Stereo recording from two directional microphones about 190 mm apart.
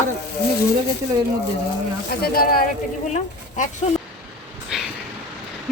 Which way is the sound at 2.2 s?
50° left (ahead or behind).